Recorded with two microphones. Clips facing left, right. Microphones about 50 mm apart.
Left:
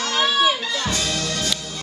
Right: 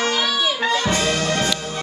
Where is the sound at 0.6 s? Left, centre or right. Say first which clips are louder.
Right 5 dB; right.